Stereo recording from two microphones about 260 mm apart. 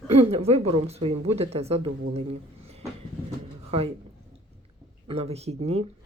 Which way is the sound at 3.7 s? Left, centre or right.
Right.